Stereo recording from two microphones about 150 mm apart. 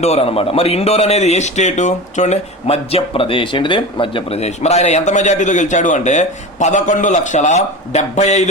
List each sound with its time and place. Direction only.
0.0 s a man's voice: 45° left (ahead or behind)